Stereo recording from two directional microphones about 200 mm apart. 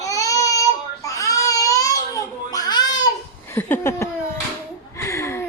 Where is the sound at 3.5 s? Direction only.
10° left (ahead or behind).